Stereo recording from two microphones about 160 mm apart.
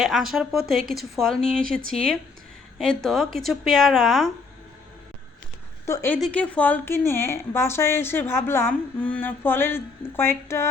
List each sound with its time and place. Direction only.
0.0 s speech: centre (ahead or behind)
0.8 s a woman's voice: 65° right (ahead or behind)
1.1 s speech: centre (ahead or behind)
1.6 s a woman's voice: 60° right (ahead or behind)
3.0 s speech: centre (ahead or behind)
5.8 s speech: 15° left (ahead or behind)
6.1 s a woman's voice: 5° left (ahead or behind)